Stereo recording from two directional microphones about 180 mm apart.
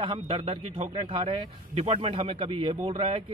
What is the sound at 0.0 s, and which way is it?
A man's voice, 30° right (ahead or behind).